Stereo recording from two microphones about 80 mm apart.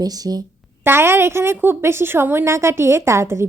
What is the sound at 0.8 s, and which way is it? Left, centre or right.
Speech, right.